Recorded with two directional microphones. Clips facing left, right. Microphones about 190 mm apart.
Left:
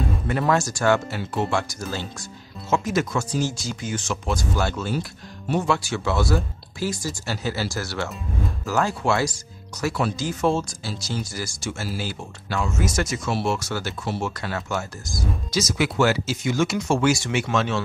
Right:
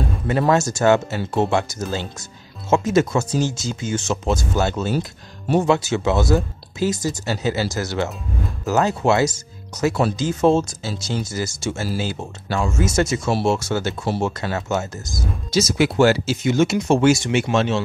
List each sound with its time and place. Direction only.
0.3 s speech: 25° right (ahead or behind)